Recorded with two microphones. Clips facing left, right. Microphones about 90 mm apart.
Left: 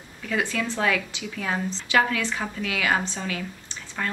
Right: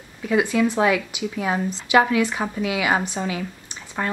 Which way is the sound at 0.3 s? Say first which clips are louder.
Right 7 dB; 15° right (ahead or behind).